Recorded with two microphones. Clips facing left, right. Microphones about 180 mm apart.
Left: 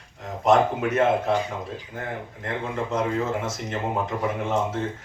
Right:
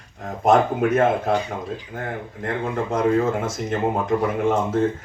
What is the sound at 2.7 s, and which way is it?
Speech, 55° right (ahead or behind).